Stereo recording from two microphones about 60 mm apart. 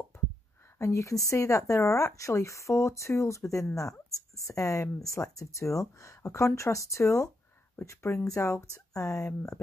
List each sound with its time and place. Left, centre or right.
0.7 s speech: left